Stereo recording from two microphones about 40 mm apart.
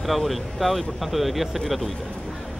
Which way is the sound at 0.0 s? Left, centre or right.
Centre.